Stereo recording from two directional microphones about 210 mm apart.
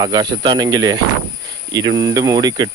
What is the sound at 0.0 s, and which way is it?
Speech, 20° right (ahead or behind).